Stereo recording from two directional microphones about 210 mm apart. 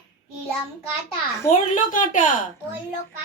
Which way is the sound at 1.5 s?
35° left (ahead or behind).